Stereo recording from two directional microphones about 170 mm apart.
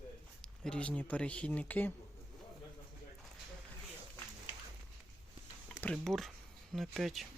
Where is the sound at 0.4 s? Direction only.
5° left (ahead or behind).